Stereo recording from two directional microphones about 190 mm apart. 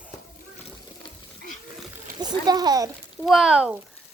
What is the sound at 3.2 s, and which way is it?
Speech, centre (ahead or behind).